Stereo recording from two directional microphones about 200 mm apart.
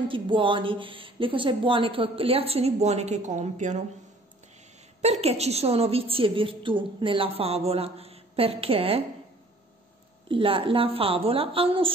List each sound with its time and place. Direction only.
0.1 s a woman's voice: 25° right (ahead or behind)
5.0 s a woman's voice: 30° right (ahead or behind)
10.2 s a woman's voice: 25° right (ahead or behind)